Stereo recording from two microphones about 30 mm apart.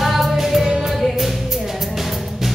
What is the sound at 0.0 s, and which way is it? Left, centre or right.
Music, centre.